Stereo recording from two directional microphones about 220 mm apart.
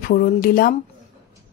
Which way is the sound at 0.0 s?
40° left (ahead or behind).